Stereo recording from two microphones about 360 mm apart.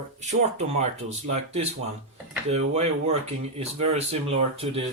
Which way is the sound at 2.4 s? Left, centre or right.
Centre.